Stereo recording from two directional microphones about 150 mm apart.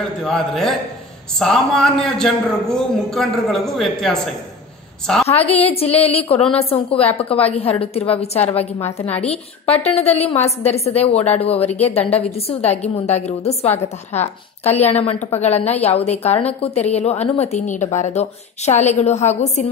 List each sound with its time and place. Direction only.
0.2 s a man's voice: 5° left (ahead or behind)
5.3 s a woman's voice: 40° left (ahead or behind)